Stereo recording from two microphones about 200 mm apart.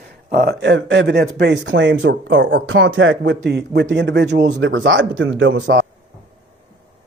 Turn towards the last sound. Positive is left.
turn(degrees=-70)  # may be behind; listen again after turning